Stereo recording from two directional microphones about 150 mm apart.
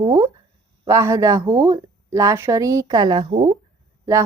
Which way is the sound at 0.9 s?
20° right (ahead or behind).